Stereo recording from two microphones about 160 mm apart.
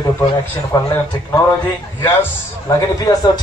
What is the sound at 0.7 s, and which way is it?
Speech, 25° left (ahead or behind).